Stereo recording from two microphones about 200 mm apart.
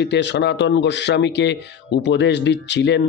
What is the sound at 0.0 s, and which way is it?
Speech, 60° left (ahead or behind).